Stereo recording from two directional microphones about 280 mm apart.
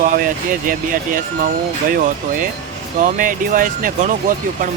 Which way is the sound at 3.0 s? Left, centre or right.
Right.